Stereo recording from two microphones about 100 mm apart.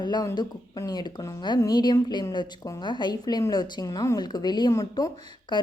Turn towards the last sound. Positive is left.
turn(degrees=50)  # may be behind; listen again after turning